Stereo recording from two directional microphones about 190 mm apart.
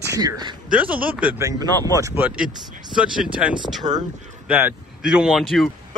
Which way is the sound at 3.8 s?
20° right (ahead or behind).